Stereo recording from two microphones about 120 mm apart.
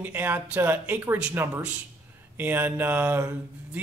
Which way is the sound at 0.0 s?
15° right (ahead or behind).